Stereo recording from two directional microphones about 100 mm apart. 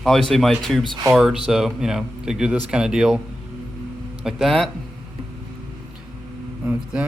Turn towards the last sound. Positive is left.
turn(degrees=-15)  # may be behind; listen again after turning